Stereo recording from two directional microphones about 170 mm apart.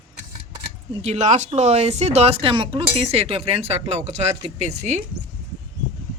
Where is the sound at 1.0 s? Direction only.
40° right (ahead or behind).